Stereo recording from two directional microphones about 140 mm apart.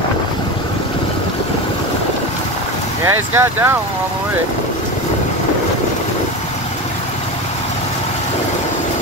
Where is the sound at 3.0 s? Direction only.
20° right (ahead or behind).